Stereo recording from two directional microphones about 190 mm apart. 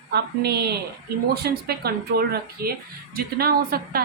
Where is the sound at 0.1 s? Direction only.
60° right (ahead or behind).